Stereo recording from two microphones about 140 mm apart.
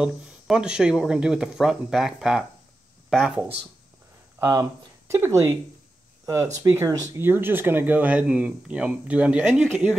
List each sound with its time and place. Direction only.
0.0 s speech: 5° right (ahead or behind)
4.4 s speech: 25° right (ahead or behind); by 9.9 s 5° right (ahead or behind)